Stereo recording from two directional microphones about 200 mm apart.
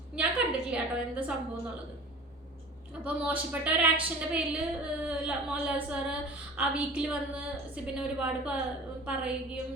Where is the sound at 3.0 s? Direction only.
10° right (ahead or behind).